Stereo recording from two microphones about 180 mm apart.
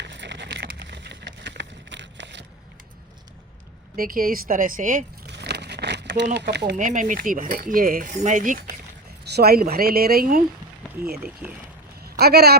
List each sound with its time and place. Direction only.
0.0 s vehicle: 80° right
3.9 s speech: 50° right (ahead or behind)
5.2 s a sound: 70° right (ahead or behind)
6.3 s speech: 70° right (ahead or behind)
6.7 s speech: 45° right (ahead or behind)
9.2 s speech: 65° right (ahead or behind)
12.1 s speech: 60° right (ahead or behind)